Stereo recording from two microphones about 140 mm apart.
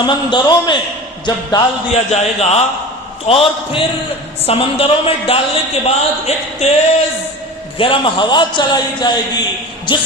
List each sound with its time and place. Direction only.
0.0 s a man's voice: 30° left (ahead or behind)
1.9 s a man's voice: 50° left (ahead or behind)
7.8 s a man's voice: 35° left (ahead or behind)